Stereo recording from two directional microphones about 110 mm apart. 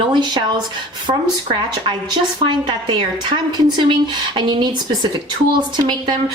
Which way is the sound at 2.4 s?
45° right (ahead or behind).